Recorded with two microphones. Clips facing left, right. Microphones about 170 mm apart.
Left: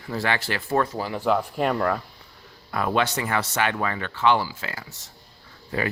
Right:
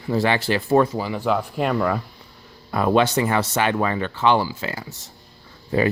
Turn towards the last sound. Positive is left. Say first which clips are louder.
# right 7 dB
turn(degrees=-25)  # may be behind; listen again after turning